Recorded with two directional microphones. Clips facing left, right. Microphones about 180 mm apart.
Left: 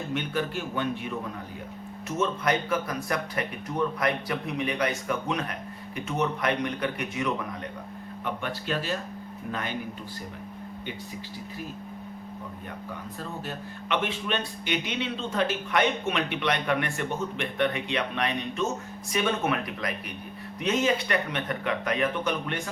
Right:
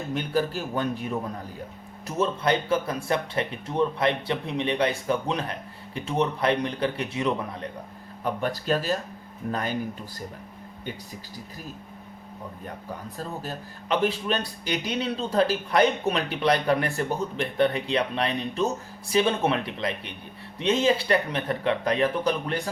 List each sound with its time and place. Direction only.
0.1 s speech: 35° right (ahead or behind)
13.1 s speech: 40° right (ahead or behind)